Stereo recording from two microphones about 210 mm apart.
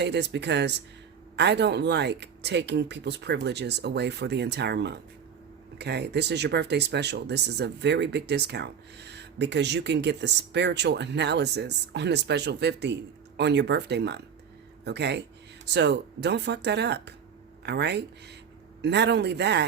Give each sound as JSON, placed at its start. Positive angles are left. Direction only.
{"t": 0.0, "sound": "speech", "side_deg": -55}